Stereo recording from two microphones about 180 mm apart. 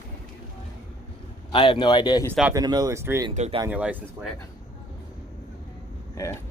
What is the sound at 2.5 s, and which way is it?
Speech, 20° right (ahead or behind).